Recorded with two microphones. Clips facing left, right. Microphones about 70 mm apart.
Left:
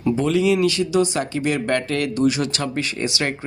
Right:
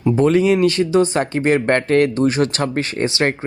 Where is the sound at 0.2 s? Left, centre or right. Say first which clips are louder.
Right 5 dB; right.